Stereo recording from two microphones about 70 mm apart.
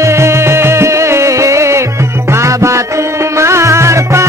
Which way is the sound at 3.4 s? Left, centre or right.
Right.